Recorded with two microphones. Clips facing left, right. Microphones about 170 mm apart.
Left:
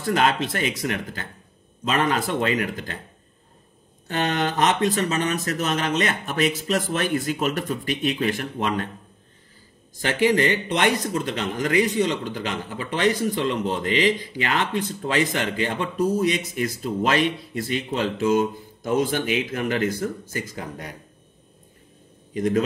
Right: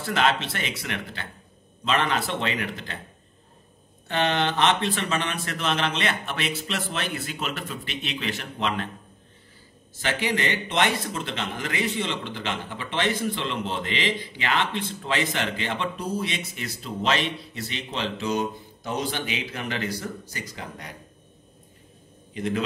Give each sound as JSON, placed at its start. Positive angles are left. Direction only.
{"t": 0.0, "sound": "a man's voice", "side_deg": 45}
{"t": 4.1, "sound": "a man's voice", "side_deg": 45}
{"t": 10.0, "sound": "a man's voice", "side_deg": 45}
{"t": 22.3, "sound": "a man's voice", "side_deg": 45}